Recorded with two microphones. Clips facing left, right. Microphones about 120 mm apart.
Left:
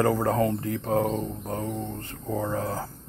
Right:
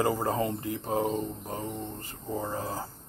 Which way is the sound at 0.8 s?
5° right (ahead or behind).